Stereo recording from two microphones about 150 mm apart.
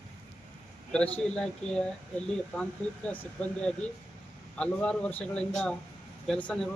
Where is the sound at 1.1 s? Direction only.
5° left (ahead or behind).